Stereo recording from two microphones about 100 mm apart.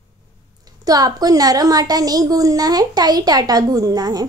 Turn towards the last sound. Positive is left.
turn(degrees=-40)  # may be behind; listen again after turning